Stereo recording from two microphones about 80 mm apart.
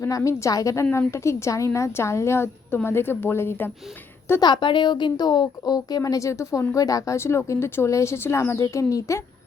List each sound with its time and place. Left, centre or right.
0.3 s a woman's voice: left
4.4 s a woman's voice: left